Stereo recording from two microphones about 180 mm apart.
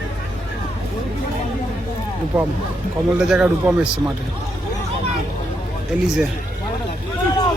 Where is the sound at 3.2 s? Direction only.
5° right (ahead or behind).